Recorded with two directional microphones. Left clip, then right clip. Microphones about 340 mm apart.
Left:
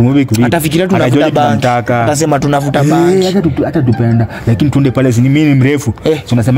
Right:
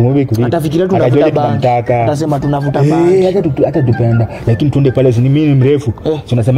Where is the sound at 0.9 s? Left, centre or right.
Left.